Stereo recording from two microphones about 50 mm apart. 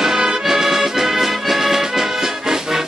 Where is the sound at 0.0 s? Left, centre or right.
Centre.